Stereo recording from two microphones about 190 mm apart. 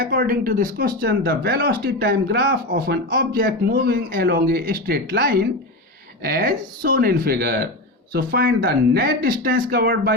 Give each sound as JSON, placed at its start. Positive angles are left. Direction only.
{"t": 0.0, "sound": "speech", "side_deg": -50}